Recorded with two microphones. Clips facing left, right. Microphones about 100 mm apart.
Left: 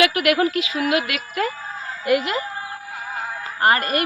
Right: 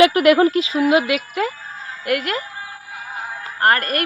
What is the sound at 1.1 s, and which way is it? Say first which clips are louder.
Speech: right 3 dB; 15° right (ahead or behind).